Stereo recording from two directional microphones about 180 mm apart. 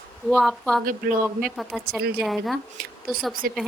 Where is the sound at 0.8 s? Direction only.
50° right (ahead or behind).